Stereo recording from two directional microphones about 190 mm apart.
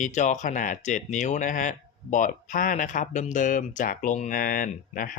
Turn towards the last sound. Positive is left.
turn(degrees=50)  # may be behind; listen again after turning